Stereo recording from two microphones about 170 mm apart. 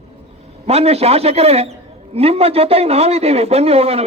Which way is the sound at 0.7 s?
35° right (ahead or behind).